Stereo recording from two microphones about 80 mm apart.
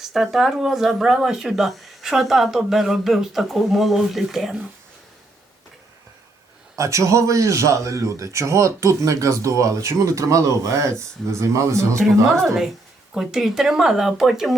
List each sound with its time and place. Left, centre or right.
0.0 s speech: centre
6.7 s a man's voice: right
11.9 s speech: centre